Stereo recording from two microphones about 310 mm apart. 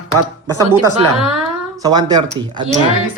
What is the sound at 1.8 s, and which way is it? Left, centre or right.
Speech, centre.